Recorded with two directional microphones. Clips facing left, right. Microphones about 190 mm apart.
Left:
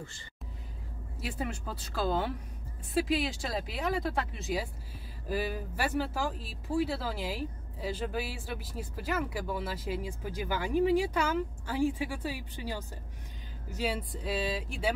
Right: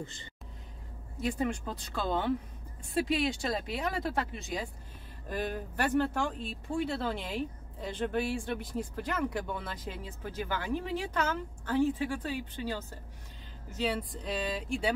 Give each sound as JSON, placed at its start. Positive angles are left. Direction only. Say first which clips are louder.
{"t": 0.0, "sound": "speech", "louder": "right 3 dB", "side_deg": -20}
{"t": 1.2, "sound": "speech", "louder": "right 5 dB", "side_deg": 5}